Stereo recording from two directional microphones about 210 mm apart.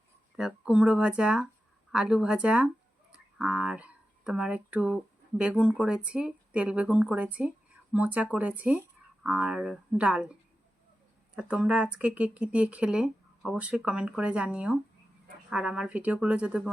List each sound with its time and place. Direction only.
0.3 s speech: centre (ahead or behind)
11.3 s speech: 5° right (ahead or behind)